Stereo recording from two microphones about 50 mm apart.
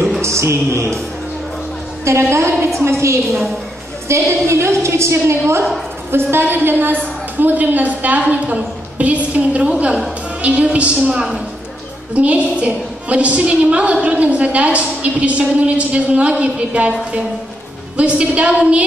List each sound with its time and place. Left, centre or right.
0.2 s a sound: right
2.0 s a woman's voice: right
5.4 s a woman's voice: right
11.1 s a woman's voice: centre
12.1 s a woman's voice: right
17.9 s a woman's voice: right